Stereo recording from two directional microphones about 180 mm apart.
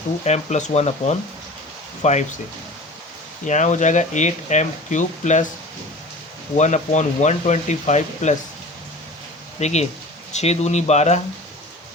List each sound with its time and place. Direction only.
0.3 s speech: 40° left (ahead or behind)
3.4 s speech: 40° left (ahead or behind)
6.6 s speech: 40° left (ahead or behind)
9.6 s speech: 40° left (ahead or behind)